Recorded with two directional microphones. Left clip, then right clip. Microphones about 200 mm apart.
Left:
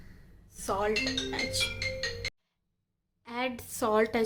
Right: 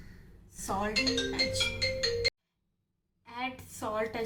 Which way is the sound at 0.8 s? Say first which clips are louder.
Right 2 dB; 55° left (ahead or behind).